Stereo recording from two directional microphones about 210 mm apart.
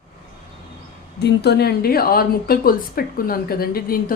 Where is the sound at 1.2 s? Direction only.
50° left (ahead or behind).